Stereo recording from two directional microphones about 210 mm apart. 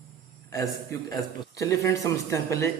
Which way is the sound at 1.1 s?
15° left (ahead or behind).